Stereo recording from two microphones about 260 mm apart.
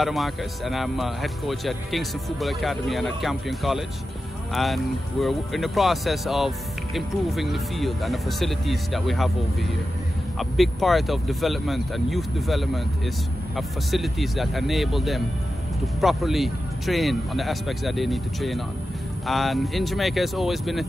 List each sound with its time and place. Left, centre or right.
0.0 s speech: centre
10.5 s speech: centre